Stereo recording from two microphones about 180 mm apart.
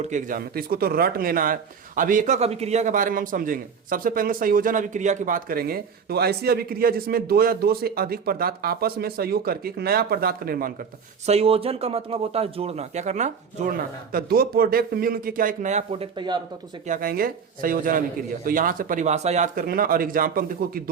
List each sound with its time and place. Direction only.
0.0 s a man's voice: 45° right (ahead or behind)
11.3 s speech: 35° right (ahead or behind)
16.8 s speech: 50° right (ahead or behind)
19.6 s speech: 55° right (ahead or behind)